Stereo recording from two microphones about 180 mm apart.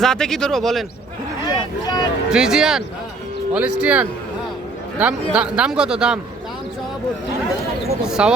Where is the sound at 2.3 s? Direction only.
5° right (ahead or behind).